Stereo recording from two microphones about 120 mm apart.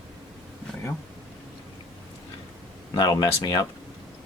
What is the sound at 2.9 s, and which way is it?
Speech, 35° left (ahead or behind).